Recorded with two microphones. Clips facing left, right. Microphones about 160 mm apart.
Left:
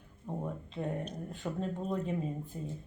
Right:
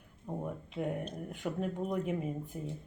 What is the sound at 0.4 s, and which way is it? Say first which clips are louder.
Speech: right 2 dB; 15° right (ahead or behind).